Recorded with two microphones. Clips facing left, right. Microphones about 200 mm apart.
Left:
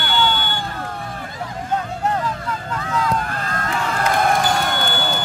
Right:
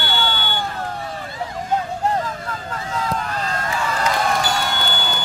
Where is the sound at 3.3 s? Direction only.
50° left (ahead or behind).